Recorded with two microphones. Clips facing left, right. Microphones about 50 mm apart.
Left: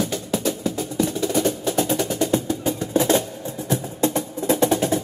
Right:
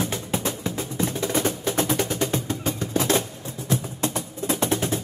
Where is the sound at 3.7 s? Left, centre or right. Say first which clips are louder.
Left 4 dB; left.